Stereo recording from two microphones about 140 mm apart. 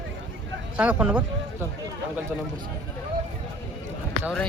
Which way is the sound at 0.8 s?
10° right (ahead or behind).